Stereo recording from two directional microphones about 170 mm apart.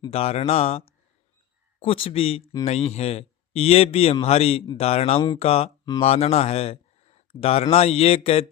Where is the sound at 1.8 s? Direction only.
35° left (ahead or behind).